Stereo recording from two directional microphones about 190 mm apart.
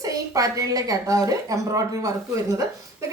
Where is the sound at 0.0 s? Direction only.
20° right (ahead or behind).